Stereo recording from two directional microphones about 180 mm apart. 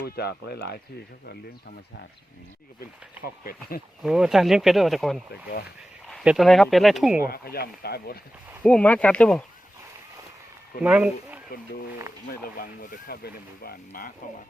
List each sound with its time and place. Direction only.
0.0 s speech: 60° left (ahead or behind)
3.2 s speech: 55° left (ahead or behind)
4.0 s speech: centre (ahead or behind)
5.3 s speech: 60° left (ahead or behind)
6.1 s speech: centre (ahead or behind)
7.2 s speech: 55° left (ahead or behind)
8.6 s speech: 5° left (ahead or behind)
10.8 s speech: 5° right (ahead or behind)
11.5 s speech: 55° left (ahead or behind)